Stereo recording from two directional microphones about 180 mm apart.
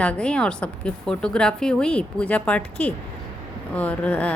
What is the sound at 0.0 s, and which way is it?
A woman's voice, 5° left (ahead or behind).